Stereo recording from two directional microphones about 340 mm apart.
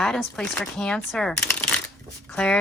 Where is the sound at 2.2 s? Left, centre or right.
Centre.